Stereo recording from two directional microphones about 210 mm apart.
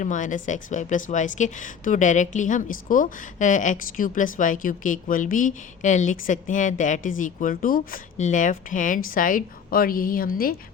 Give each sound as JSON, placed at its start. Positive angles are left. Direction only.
{"t": 0.0, "sound": "a woman's voice", "side_deg": 35}